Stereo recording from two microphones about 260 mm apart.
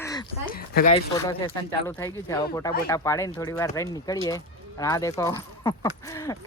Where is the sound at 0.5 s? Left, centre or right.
Left.